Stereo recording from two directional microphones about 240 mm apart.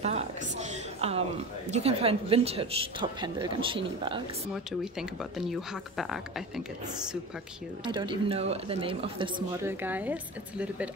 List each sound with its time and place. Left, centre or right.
0.0 s speech: right
5.4 s speech: centre
7.8 s speech: centre
9.6 s a woman's voice: centre